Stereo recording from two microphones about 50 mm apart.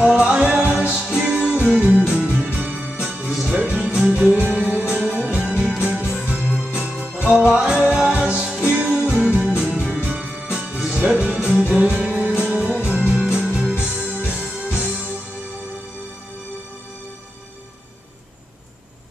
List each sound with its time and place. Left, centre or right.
0.0 s music: centre
3.3 s music: centre
3.5 s music: right